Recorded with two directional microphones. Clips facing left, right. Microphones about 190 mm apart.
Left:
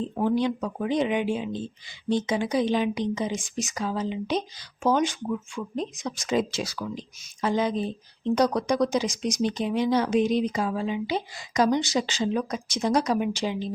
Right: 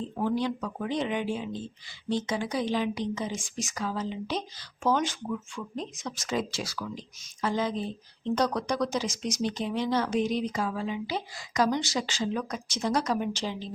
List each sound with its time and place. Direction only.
0.2 s a woman's voice: 20° left (ahead or behind)